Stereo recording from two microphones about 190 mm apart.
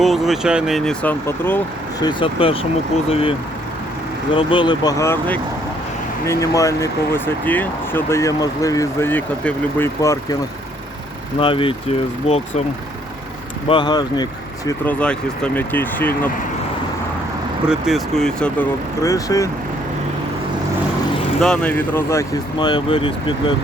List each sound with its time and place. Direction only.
0.0 s speech: centre (ahead or behind)
2.0 s speech: 25° left (ahead or behind)
4.4 s speech: 25° left (ahead or behind)
11.3 s speech: 30° left (ahead or behind)
13.7 s speech: 25° left (ahead or behind)
14.7 s speech: 10° left (ahead or behind)
17.7 s speech: centre (ahead or behind)
19.0 s speech: 15° left (ahead or behind)
21.4 s speech: 5° left (ahead or behind); by 23.6 s 25° left (ahead or behind)